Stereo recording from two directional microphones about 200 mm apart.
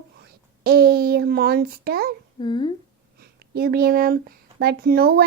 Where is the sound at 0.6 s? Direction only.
50° right (ahead or behind).